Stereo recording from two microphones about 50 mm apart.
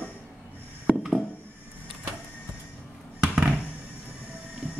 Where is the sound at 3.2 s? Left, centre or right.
Right.